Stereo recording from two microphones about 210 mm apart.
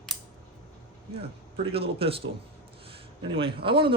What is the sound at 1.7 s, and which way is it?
Speech, 25° right (ahead or behind).